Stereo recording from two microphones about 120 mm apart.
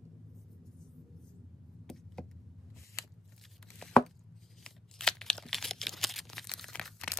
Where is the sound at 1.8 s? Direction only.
5° left (ahead or behind).